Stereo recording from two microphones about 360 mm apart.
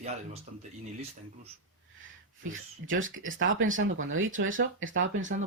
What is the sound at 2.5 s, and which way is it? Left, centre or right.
Speech, right.